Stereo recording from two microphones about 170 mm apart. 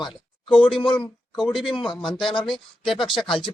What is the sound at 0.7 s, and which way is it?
Speech, 30° left (ahead or behind).